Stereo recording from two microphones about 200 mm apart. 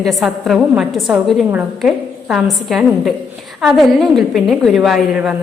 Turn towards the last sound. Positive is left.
turn(degrees=0)  # may be behind; listen again after turning